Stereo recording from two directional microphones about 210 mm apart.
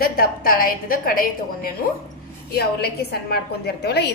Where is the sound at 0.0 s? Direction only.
45° left (ahead or behind).